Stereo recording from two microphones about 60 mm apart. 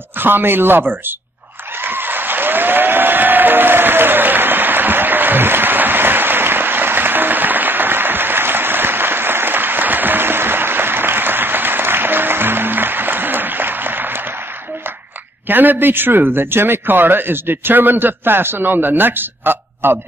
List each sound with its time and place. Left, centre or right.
0.2 s a man's voice: right
1.8 s applause: right
15.4 s a man's voice: right